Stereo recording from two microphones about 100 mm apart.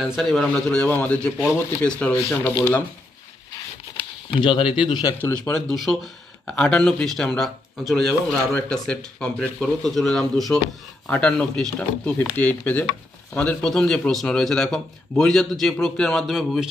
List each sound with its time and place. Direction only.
0.1 s speech: centre (ahead or behind)
2.1 s speech: 25° left (ahead or behind)
3.9 s speech: 60° left (ahead or behind)
5.2 s a man's voice: 10° left (ahead or behind)